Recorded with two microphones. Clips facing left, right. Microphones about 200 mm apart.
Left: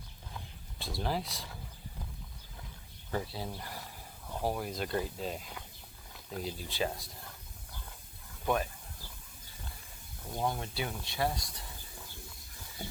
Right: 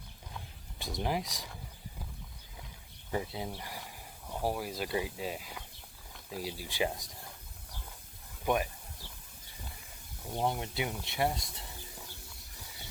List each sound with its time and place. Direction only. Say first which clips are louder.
0.8 s speech: right 1 dB; 15° right (ahead or behind)
3.1 s speech: right 1 dB; 15° right (ahead or behind)
8.4 s speech: right 1 dB; 15° right (ahead or behind)
10.3 s speech: right 2 dB; 20° right (ahead or behind)